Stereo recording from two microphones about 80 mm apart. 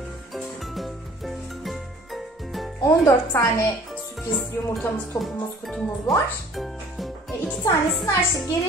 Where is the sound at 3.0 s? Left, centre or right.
Left.